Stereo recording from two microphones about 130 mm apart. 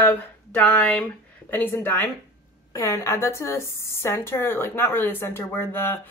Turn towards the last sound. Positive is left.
turn(degrees=15)  # may be behind; listen again after turning